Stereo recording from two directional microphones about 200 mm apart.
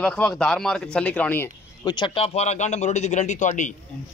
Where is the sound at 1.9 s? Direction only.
25° left (ahead or behind).